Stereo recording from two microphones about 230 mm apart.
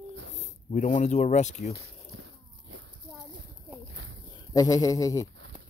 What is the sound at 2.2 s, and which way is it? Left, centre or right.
Biting, right.